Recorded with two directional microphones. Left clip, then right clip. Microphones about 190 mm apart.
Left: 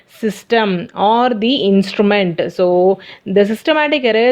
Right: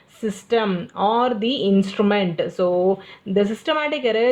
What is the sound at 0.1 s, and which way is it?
Speech, 40° left (ahead or behind).